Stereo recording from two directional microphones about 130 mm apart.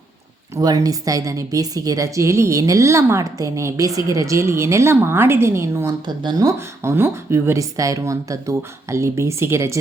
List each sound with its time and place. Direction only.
0.5 s speech: 30° right (ahead or behind)
6.1 s speech: 30° right (ahead or behind)